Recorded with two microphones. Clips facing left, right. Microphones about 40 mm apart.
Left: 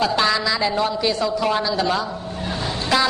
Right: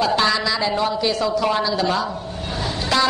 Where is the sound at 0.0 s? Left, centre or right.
Centre.